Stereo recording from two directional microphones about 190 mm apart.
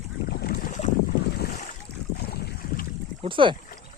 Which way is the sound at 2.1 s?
55° left (ahead or behind).